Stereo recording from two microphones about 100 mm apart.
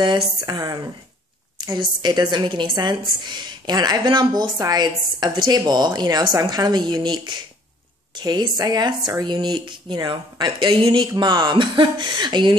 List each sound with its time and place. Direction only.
0.5 s a woman's voice: 40° right (ahead or behind)
10.7 s speech: 65° right (ahead or behind)
11.1 s a woman's voice: 45° right (ahead or behind)